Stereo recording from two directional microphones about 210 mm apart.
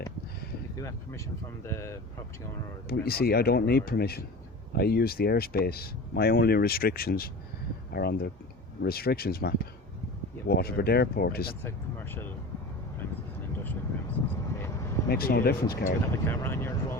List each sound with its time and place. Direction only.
0.8 s speech: 15° left (ahead or behind)
2.9 s speech: 45° left (ahead or behind)
11.6 s speech: 10° left (ahead or behind)
15.1 s speech: 45° left (ahead or behind)
16.2 s a sound: 10° left (ahead or behind)